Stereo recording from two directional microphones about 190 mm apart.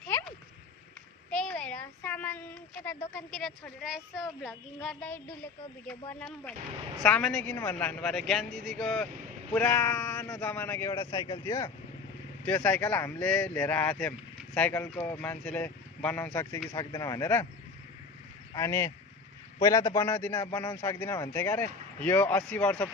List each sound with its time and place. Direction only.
0.0 s a sound: 5° left (ahead or behind)
3.2 s a woman's voice: centre (ahead or behind)
7.5 s a woman's voice: 15° left (ahead or behind)
10.9 s a man's voice: 25° left (ahead or behind)
18.5 s a man's voice: 15° left (ahead or behind)